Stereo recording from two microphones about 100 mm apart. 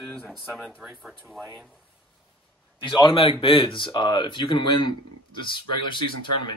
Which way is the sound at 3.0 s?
60° left (ahead or behind).